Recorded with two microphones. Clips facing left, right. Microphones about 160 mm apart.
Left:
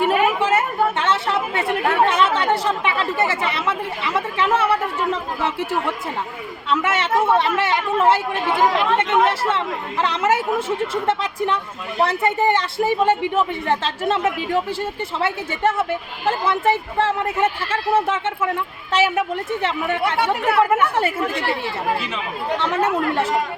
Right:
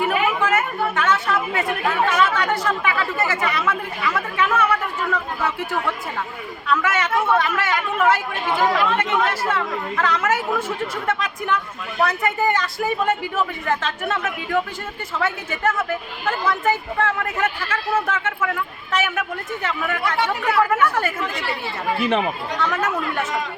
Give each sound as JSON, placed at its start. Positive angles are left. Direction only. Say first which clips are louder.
{"t": 0.3, "sound": "speech", "louder": "left 2 dB", "side_deg": 30}
{"t": 6.7, "sound": "speech", "louder": "left 1 dB", "side_deg": 25}
{"t": 22.0, "sound": "speech", "louder": "right 9 dB", "side_deg": -55}
{"t": 22.5, "sound": "speech", "louder": "left 4 dB", "side_deg": 25}